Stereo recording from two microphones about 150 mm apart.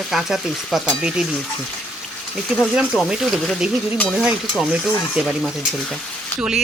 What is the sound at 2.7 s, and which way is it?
Speech, 5° right (ahead or behind).